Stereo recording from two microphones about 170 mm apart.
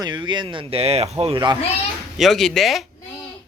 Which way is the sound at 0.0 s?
25° right (ahead or behind).